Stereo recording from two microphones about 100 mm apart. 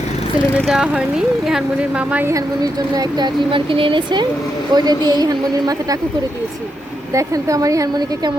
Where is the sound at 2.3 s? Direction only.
35° right (ahead or behind); by 4.2 s 55° right (ahead or behind).